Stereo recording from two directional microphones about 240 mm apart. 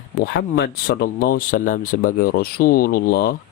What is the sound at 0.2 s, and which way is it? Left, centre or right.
Speech, left.